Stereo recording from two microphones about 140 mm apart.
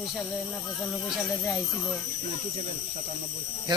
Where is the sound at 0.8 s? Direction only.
Centre (ahead or behind).